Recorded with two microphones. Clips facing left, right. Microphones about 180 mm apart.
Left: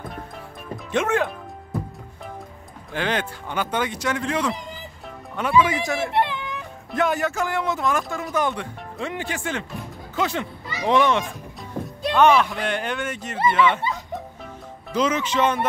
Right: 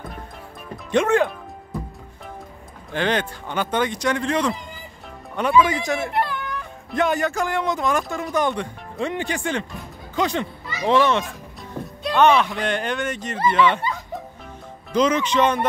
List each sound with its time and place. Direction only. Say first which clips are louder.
0.9 s speech: right 4 dB; 5° left (ahead or behind)
2.9 s speech: right 3 dB; 5° left (ahead or behind)
6.1 s whimper: left 1 dB; 20° left (ahead or behind)
6.9 s speech: right 1 dB; 5° left (ahead or behind)
11.7 s music: left 2 dB; 10° left (ahead or behind)
12.2 s speech: even; 10° left (ahead or behind)
14.9 s speech: right 3 dB; 5° left (ahead or behind)